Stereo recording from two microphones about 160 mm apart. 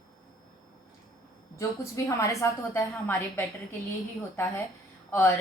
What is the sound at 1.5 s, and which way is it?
A woman's voice, 20° left (ahead or behind).